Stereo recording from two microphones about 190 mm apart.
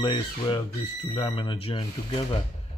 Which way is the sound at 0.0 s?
25° left (ahead or behind).